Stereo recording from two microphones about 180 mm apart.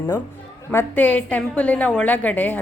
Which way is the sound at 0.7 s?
10° left (ahead or behind).